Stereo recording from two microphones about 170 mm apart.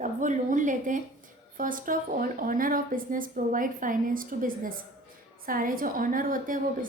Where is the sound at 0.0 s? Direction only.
50° right (ahead or behind).